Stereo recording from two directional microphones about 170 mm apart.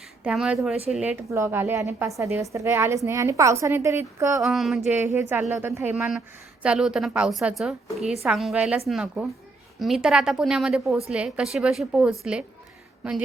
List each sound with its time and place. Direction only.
0.3 s a woman's voice: 5° right (ahead or behind)
4.4 s a woman's voice: centre (ahead or behind)
4.9 s a woman's voice: 10° right (ahead or behind)